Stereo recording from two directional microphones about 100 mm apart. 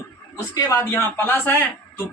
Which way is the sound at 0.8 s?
25° left (ahead or behind).